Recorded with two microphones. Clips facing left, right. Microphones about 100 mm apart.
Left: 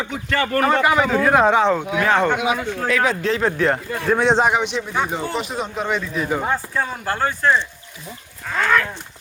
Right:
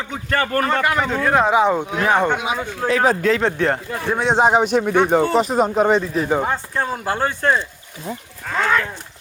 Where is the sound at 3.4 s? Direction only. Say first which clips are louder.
Even; 30° right (ahead or behind).